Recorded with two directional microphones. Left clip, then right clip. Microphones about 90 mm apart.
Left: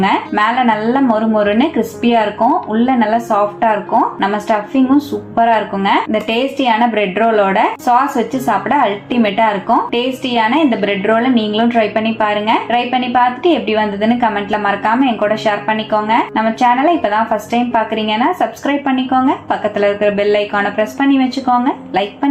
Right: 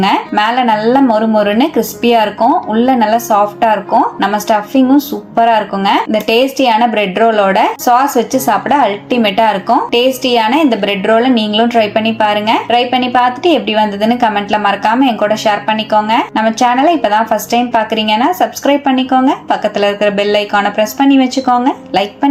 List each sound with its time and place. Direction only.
0.0 s a woman's voice: 40° right (ahead or behind)